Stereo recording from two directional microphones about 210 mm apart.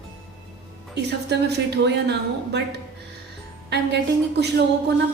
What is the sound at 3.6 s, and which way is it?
A woman's voice, 55° right (ahead or behind).